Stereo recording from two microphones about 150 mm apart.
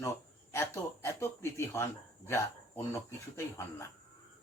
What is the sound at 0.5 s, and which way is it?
Speech, 15° left (ahead or behind).